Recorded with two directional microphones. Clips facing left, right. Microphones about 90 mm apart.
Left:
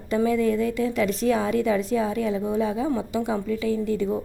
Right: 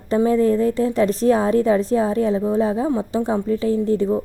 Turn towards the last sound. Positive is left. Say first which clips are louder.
# right 5 dB
turn(degrees=-30)  # may be behind; listen again after turning